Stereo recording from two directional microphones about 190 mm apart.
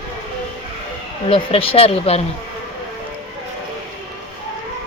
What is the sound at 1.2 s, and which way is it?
Speech, 30° left (ahead or behind).